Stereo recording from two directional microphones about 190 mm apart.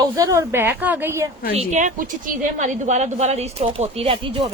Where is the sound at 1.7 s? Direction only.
40° right (ahead or behind).